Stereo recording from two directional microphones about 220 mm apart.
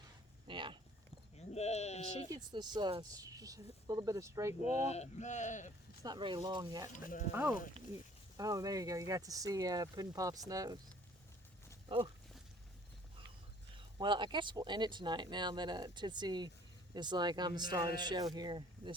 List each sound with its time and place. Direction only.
0.4 s a sound: 20° right (ahead or behind)
1.4 s sheep: 30° left (ahead or behind)
2.3 s speech: 20° right (ahead or behind)
4.6 s speech: 30° left (ahead or behind)
6.0 s speech: 20° right (ahead or behind)
6.9 s speech: 35° left (ahead or behind)
7.8 s speech: 30° right (ahead or behind)
8.4 s speech: 15° right (ahead or behind)
11.9 s speech: 25° right (ahead or behind)
13.7 s speech: 20° right (ahead or behind)